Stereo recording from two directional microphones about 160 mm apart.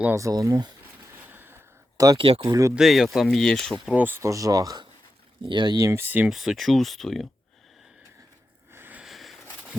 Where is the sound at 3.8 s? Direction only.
10° right (ahead or behind).